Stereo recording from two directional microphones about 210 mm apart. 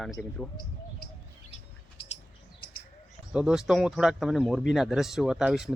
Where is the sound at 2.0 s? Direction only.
25° left (ahead or behind).